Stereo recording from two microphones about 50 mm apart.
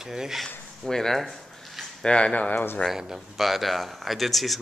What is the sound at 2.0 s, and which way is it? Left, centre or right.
Speech, left.